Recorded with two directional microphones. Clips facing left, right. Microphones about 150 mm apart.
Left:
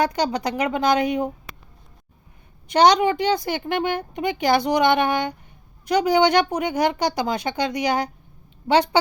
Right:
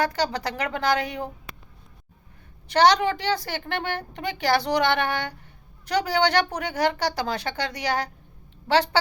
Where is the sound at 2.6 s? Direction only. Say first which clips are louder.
Left 3 dB; 15° left (ahead or behind).